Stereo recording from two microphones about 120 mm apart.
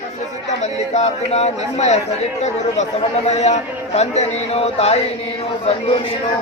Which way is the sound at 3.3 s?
65° left (ahead or behind).